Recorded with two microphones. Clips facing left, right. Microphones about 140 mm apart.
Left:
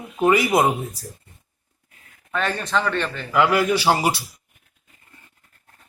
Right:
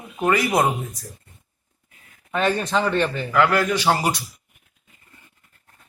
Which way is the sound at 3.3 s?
15° left (ahead or behind).